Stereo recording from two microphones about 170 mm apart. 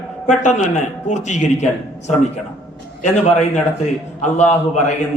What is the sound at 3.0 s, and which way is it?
A man's voice, 40° left (ahead or behind).